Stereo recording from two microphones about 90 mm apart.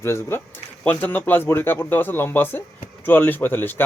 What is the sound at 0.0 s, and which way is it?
Speech, 30° left (ahead or behind).